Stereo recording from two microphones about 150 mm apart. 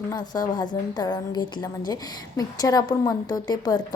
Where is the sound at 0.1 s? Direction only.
30° left (ahead or behind).